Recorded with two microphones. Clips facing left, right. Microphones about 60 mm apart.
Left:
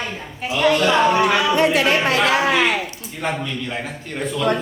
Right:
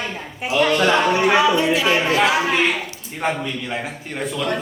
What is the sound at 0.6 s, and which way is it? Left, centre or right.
Speech, centre.